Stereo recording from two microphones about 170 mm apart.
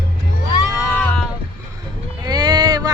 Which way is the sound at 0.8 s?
10° left (ahead or behind).